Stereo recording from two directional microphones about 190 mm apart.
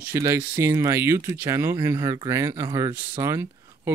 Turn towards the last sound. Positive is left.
turn(degrees=-15)  # may be behind; listen again after turning